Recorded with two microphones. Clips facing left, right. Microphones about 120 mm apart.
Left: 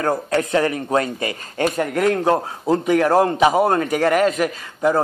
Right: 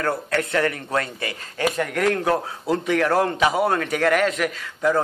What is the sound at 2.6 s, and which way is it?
A man's voice, 35° left (ahead or behind).